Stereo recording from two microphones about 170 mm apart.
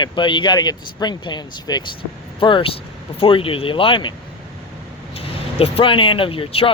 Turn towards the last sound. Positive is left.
turn(degrees=35)  # may be behind; listen again after turning